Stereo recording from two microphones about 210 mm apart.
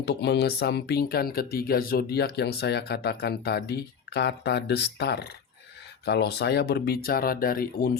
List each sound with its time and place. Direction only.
0.0 s speech: 55° left (ahead or behind)